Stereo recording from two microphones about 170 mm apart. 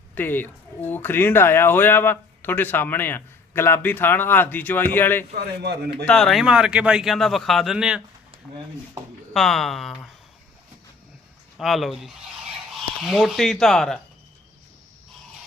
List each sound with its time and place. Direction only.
0.1 s speech: 10° left (ahead or behind)
5.3 s a man's voice: 70° right (ahead or behind)
6.1 s speech: 5° left (ahead or behind)
9.3 s speech: centre (ahead or behind)
11.5 s speech: centre (ahead or behind)